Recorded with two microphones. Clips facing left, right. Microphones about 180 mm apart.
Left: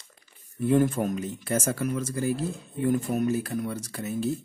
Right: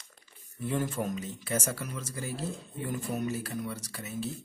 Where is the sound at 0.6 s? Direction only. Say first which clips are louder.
Left 9 dB; 55° left (ahead or behind).